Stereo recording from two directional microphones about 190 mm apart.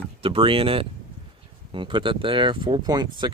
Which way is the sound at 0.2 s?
30° right (ahead or behind).